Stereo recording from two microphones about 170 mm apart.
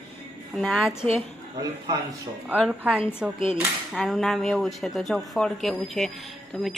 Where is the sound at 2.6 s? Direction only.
5° right (ahead or behind).